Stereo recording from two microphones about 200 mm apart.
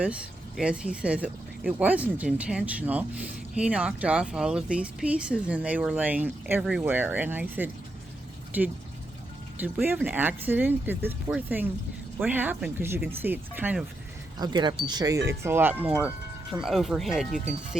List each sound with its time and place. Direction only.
0.0 s speech: 5° right (ahead or behind)
14.3 s speech: 20° right (ahead or behind); by 17.4 s centre (ahead or behind)